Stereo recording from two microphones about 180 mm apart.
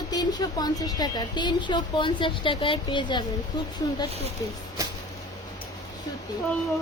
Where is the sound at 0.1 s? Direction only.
20° left (ahead or behind).